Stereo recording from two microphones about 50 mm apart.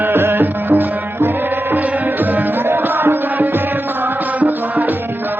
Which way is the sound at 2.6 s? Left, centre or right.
Right.